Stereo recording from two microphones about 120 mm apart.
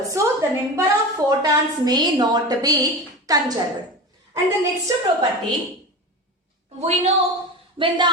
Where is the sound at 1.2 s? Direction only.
35° right (ahead or behind).